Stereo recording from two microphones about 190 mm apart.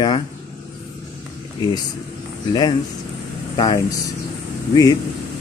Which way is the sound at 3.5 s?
25° left (ahead or behind).